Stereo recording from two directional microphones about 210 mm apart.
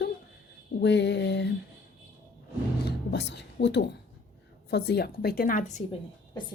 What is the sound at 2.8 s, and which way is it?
Music, 55° left (ahead or behind).